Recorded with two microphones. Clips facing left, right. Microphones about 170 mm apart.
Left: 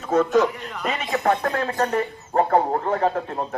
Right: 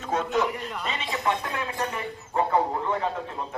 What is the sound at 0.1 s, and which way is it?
A man's voice, 40° left (ahead or behind).